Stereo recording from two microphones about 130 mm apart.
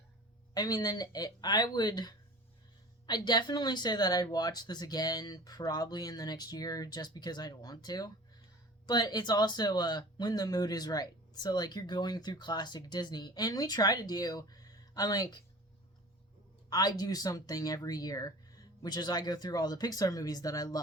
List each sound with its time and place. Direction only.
0.5 s speech: 30° left (ahead or behind)
16.6 s speech: 30° left (ahead or behind)